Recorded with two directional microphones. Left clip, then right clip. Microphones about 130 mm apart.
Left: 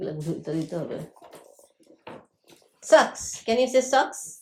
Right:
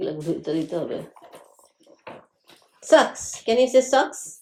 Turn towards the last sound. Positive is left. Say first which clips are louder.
# right 2 dB
turn(degrees=-5)  # may be behind; listen again after turning